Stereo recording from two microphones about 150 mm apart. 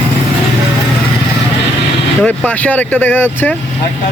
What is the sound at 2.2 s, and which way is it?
Speech, 10° left (ahead or behind).